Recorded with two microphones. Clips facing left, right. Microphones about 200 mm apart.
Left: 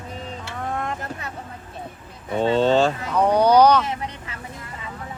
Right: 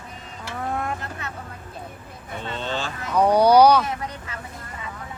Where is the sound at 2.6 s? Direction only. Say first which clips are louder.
Left 12 dB; 40° left (ahead or behind).